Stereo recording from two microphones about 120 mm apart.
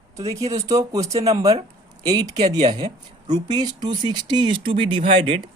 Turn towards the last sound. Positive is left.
turn(degrees=-50)  # may be behind; listen again after turning